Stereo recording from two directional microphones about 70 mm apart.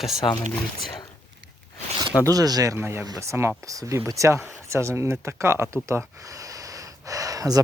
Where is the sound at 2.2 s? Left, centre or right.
Right.